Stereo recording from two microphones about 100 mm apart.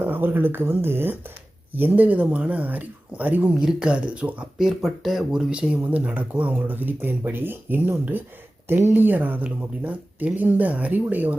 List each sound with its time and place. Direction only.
0.0 s speech: 20° right (ahead or behind)